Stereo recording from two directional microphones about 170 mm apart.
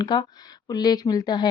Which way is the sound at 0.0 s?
25° left (ahead or behind).